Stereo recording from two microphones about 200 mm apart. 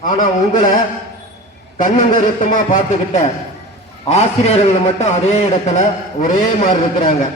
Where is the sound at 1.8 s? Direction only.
40° left (ahead or behind).